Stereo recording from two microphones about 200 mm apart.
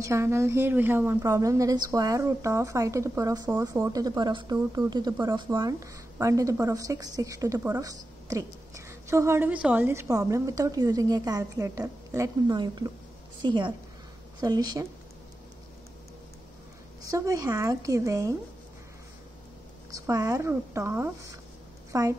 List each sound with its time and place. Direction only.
0.0 s a woman's voice: 15° right (ahead or behind)
17.0 s a woman's voice: 15° right (ahead or behind)
19.9 s a woman's voice: 15° right (ahead or behind)